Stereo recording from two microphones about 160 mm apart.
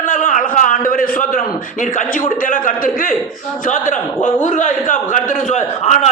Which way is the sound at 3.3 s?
Centre (ahead or behind).